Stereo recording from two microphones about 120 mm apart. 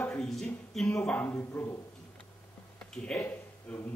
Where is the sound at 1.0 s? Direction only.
15° left (ahead or behind).